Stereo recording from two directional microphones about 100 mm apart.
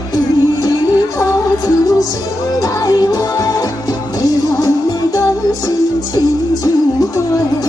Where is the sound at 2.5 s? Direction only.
35° left (ahead or behind).